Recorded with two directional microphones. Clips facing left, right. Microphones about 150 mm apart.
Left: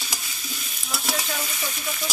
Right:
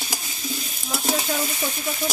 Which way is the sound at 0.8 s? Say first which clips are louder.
Right 5 dB; 45° right (ahead or behind).